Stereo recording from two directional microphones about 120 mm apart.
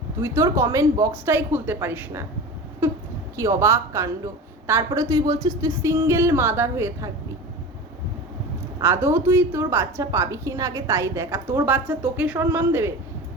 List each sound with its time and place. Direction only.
0.2 s a woman's voice: 25° right (ahead or behind)
3.3 s a woman's voice: 25° right (ahead or behind)
8.8 s a woman's voice: 20° right (ahead or behind)